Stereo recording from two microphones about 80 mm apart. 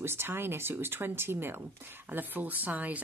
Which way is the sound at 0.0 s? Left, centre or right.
Right.